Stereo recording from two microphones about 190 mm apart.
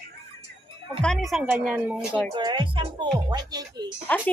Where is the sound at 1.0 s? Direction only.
Centre (ahead or behind).